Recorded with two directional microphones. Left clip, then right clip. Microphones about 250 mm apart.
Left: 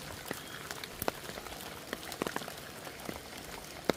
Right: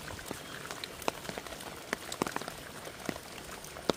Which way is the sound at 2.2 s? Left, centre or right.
Right.